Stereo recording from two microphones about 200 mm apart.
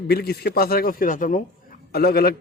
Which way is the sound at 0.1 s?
50° left (ahead or behind).